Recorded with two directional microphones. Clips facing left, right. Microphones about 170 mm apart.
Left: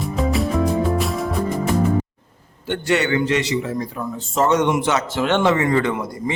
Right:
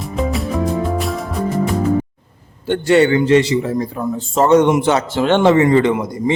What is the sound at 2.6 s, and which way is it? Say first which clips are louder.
A man's voice: right 7 dB; 30° right (ahead or behind).